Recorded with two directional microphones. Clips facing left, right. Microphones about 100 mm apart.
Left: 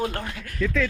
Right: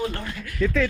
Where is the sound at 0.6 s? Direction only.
20° right (ahead or behind).